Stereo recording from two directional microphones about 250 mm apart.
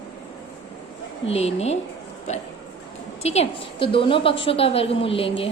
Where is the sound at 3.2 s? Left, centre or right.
Left.